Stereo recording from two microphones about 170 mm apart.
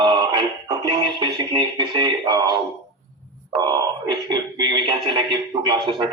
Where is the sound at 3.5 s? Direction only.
25° right (ahead or behind).